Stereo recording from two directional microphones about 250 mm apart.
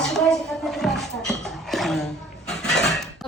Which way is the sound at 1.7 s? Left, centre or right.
Centre.